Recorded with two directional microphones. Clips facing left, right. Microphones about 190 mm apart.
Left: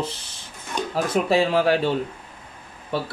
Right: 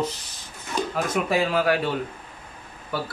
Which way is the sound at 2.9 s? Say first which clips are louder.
Left 3 dB; 25° left (ahead or behind).